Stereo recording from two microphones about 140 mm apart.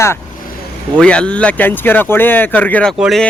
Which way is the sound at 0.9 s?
10° left (ahead or behind).